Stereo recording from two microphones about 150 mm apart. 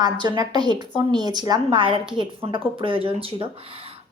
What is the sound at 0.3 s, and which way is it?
A woman's voice, 30° right (ahead or behind).